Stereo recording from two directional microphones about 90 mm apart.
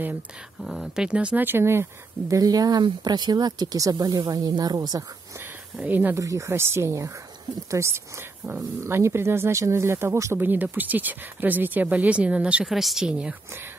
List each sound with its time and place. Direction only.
0.6 s speech: centre (ahead or behind); by 2.3 s 30° right (ahead or behind)
2.3 s speech: 45° right (ahead or behind)
5.8 s speech: 20° right (ahead or behind)
6.1 s speech: 35° right (ahead or behind)
10.4 s speech: 20° right (ahead or behind)
12.6 s speech: 5° right (ahead or behind)